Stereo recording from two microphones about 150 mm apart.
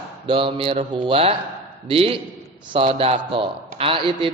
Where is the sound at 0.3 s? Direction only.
35° right (ahead or behind).